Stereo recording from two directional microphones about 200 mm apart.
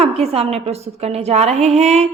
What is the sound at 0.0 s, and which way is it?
A woman's voice, 30° right (ahead or behind).